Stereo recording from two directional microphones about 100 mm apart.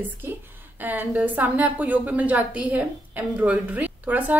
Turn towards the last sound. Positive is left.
turn(degrees=-15)  # may be behind; listen again after turning